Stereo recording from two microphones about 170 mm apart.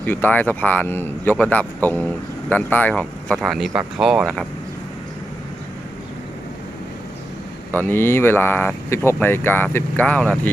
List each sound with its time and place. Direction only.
0.0 s speech: 10° left (ahead or behind)
7.7 s speech: 10° left (ahead or behind)